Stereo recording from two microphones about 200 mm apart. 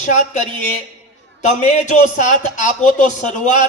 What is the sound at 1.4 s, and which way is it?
Speech, 35° left (ahead or behind).